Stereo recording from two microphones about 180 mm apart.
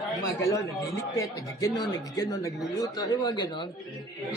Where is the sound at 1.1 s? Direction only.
20° left (ahead or behind).